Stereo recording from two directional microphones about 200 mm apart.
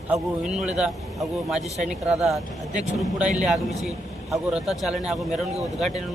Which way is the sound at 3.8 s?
5° right (ahead or behind).